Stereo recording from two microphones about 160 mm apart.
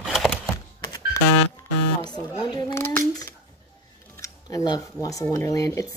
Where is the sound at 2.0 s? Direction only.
25° left (ahead or behind).